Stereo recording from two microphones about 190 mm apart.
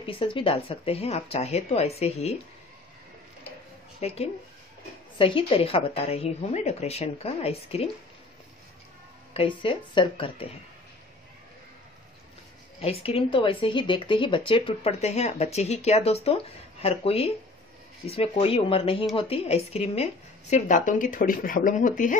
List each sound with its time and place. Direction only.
0.0 s speech: 30° left (ahead or behind)
4.0 s speech: 30° left (ahead or behind)
9.3 s speech: 30° left (ahead or behind)
12.8 s a woman's voice: 30° left (ahead or behind)